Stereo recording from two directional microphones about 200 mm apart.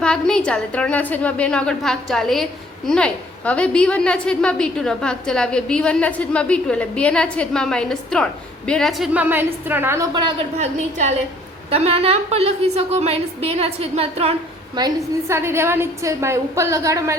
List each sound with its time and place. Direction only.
0.0 s a woman's voice: 5° left (ahead or behind); by 10.3 s 20° right (ahead or behind)
10.6 s a woman's voice: 35° right (ahead or behind)
14.8 s a woman's voice: 15° right (ahead or behind)